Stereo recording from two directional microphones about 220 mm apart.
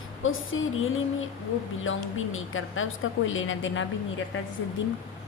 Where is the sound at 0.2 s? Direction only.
65° left (ahead or behind).